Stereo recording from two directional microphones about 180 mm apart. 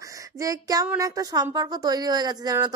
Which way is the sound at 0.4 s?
20° right (ahead or behind).